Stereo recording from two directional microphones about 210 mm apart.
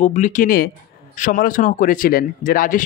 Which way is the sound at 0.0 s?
35° left (ahead or behind).